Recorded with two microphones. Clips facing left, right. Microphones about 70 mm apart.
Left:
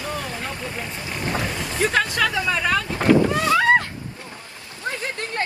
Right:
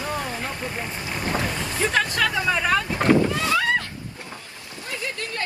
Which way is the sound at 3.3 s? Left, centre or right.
Left.